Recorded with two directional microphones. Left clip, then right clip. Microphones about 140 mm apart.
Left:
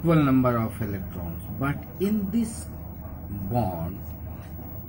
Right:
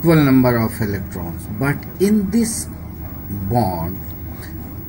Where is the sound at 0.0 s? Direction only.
20° right (ahead or behind).